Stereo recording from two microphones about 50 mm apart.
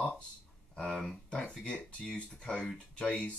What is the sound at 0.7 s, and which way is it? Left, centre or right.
Speech, centre.